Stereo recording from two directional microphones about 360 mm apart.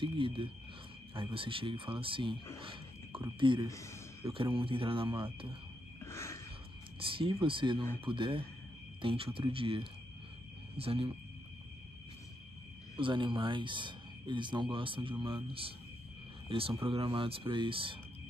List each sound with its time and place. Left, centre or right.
0.0 s speech: centre
3.7 s speech: centre
4.2 s speech: centre
5.9 s a sound: centre
7.0 s speech: centre
12.9 s speech: centre